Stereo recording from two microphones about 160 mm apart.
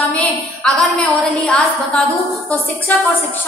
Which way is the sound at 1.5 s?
Centre (ahead or behind).